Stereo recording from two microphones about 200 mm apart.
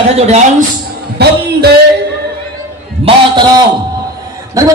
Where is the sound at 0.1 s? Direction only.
35° right (ahead or behind).